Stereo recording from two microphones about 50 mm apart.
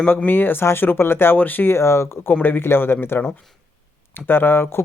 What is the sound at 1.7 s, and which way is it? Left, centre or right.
Speech, left.